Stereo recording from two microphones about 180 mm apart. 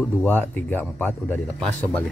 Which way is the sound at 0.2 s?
10° left (ahead or behind).